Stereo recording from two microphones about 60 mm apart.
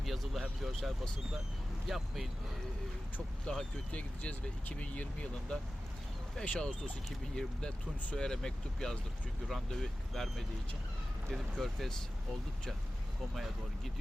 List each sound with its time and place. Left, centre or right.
0.0 s speech: centre
1.9 s speech: centre
3.4 s speech: centre
3.9 s speech: left; by 11.9 s centre
13.3 s speech: centre